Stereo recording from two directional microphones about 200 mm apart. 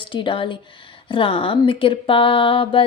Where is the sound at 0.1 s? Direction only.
25° left (ahead or behind).